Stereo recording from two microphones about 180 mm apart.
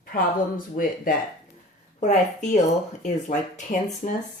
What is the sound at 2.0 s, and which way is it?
Speech, 40° left (ahead or behind).